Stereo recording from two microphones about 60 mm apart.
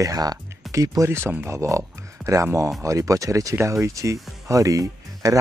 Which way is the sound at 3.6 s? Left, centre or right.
Right.